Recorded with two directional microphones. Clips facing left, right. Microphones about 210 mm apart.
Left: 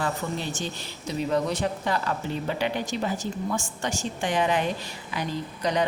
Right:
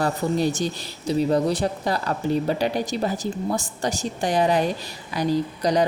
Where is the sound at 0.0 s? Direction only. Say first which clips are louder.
Right 7 dB; 40° right (ahead or behind).